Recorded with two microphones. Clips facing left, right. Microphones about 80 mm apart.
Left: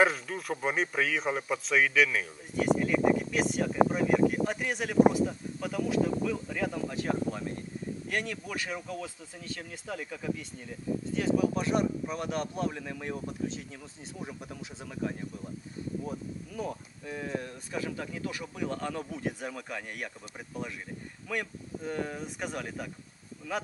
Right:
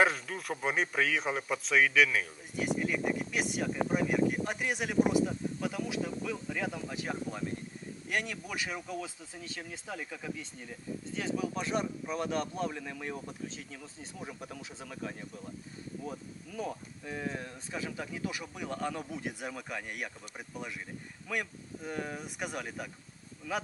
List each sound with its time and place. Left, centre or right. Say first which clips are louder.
0.0 s speech: left 2 dB; centre
11.3 s speech: left 5 dB; left
17.0 s speech: left 2 dB; centre